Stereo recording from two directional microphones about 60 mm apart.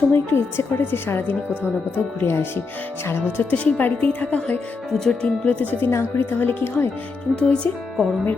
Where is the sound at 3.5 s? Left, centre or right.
Centre.